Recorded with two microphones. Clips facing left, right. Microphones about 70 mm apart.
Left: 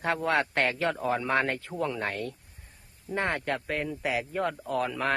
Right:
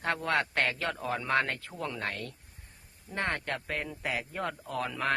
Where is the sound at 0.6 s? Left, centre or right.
Left.